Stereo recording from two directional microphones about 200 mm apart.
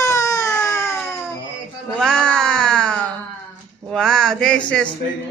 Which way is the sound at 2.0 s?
5° left (ahead or behind).